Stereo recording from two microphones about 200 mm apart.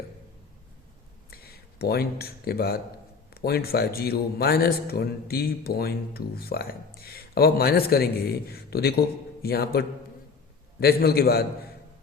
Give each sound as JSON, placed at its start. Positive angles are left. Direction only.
{"t": 1.3, "sound": "a man's voice", "side_deg": 50}